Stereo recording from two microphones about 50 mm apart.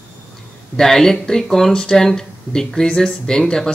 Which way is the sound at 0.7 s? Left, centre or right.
Centre.